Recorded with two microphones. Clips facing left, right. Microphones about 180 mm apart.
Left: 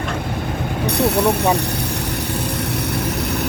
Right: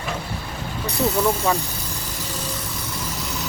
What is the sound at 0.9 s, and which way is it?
Speech, 65° left (ahead or behind).